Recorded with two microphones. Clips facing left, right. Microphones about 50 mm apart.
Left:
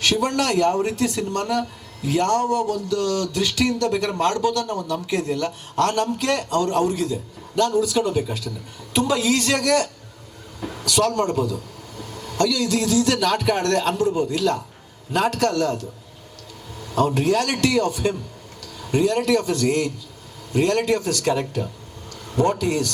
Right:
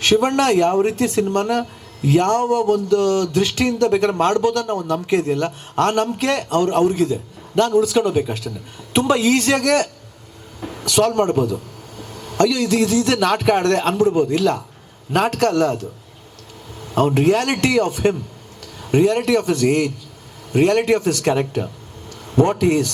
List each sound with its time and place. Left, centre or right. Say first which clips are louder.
0.0 s a man's voice: right 5 dB; right